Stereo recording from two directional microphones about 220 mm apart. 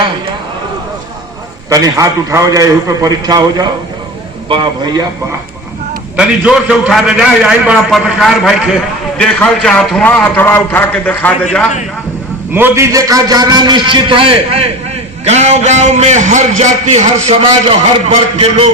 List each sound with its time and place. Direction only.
1.7 s a man's voice: 15° right (ahead or behind)
6.1 s a man's voice: 5° right (ahead or behind)
12.5 s a man's voice: 10° right (ahead or behind); by 18.7 s 25° right (ahead or behind)